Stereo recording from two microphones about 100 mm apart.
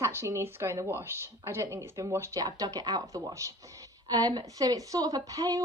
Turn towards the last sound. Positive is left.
turn(degrees=-35)  # may be behind; listen again after turning